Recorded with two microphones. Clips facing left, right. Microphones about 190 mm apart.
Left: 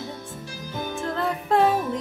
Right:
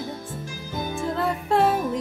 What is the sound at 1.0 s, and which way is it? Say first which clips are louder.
Music: right 1 dB; centre (ahead or behind).